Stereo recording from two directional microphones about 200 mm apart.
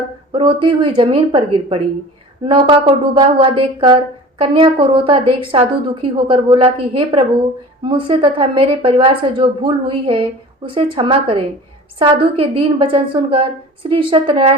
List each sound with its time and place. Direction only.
0.3 s a woman's voice: 25° right (ahead or behind)